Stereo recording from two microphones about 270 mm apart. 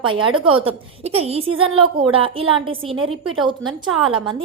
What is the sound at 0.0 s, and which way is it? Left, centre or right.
A woman's voice, centre.